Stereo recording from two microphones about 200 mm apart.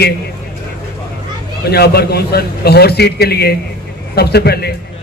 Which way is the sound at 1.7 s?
55° left (ahead or behind).